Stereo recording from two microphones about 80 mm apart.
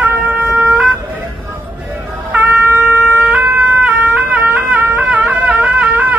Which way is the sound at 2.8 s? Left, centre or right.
Centre.